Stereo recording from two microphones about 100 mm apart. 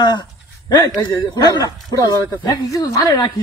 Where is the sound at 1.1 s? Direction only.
40° left (ahead or behind).